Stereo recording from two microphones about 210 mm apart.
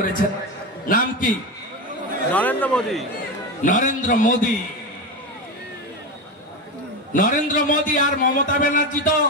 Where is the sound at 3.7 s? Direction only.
40° left (ahead or behind).